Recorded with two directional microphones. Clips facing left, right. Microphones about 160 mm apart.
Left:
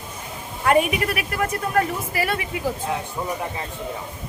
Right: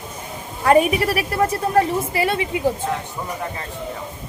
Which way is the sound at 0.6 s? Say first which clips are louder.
Right 4 dB; 35° right (ahead or behind).